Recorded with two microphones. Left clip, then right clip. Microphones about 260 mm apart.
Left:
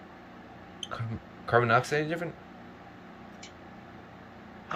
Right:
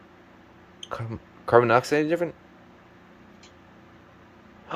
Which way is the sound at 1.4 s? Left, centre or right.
Right.